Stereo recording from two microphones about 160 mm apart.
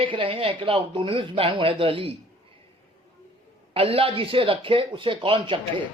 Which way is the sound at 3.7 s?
35° right (ahead or behind).